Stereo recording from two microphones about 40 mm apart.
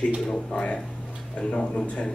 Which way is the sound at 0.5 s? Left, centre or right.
Left.